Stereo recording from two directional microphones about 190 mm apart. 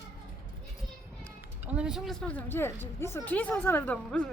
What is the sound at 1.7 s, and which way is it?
Speech, 5° right (ahead or behind).